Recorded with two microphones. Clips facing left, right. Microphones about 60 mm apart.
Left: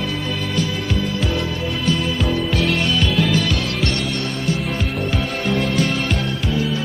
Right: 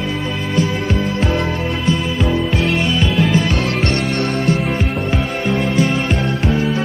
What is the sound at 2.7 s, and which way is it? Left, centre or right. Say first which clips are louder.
Music: right 2 dB; centre.